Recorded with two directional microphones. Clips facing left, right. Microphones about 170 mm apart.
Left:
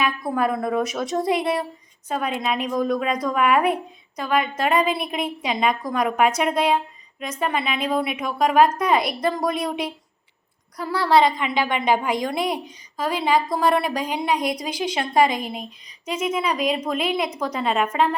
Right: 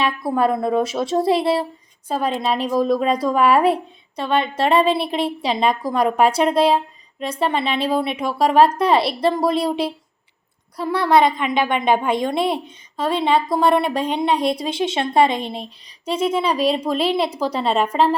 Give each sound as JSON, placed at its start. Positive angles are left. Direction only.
{"t": 0.3, "sound": "a woman's voice", "side_deg": -30}
{"t": 10.8, "sound": "a woman's voice", "side_deg": -20}